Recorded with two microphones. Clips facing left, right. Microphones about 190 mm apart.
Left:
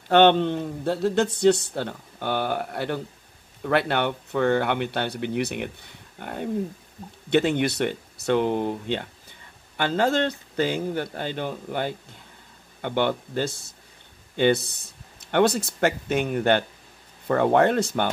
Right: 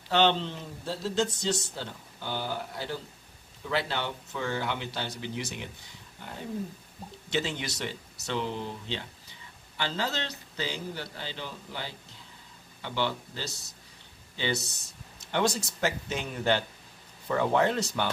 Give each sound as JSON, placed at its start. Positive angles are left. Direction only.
{"t": 0.1, "sound": "speech", "side_deg": 55}